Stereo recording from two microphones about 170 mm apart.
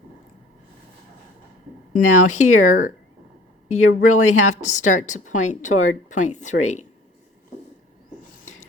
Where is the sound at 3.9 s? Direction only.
50° left (ahead or behind).